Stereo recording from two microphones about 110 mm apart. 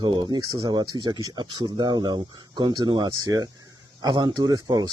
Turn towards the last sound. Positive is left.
turn(degrees=-35)  # may be behind; listen again after turning